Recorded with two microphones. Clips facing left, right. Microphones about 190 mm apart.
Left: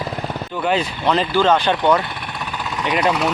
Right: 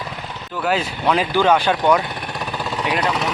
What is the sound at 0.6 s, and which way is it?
Speech, 5° right (ahead or behind).